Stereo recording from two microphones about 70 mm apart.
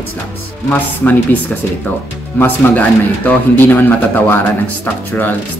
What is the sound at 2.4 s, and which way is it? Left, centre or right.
Speech, left.